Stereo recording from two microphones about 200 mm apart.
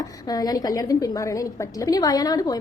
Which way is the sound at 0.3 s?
20° left (ahead or behind).